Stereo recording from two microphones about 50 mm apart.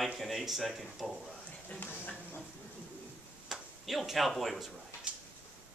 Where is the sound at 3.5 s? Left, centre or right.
Centre.